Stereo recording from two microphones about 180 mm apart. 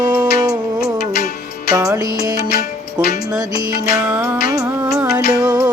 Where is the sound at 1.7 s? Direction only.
15° right (ahead or behind).